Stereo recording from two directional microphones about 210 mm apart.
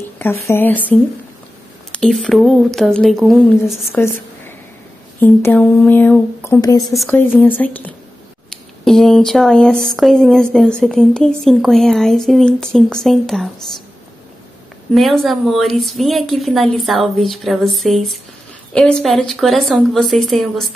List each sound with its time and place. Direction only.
0.2 s a woman's voice: 10° left (ahead or behind)
3.9 s a sound: 10° left (ahead or behind)
5.2 s a woman's voice: 10° left (ahead or behind)
15.0 s a woman's voice: centre (ahead or behind)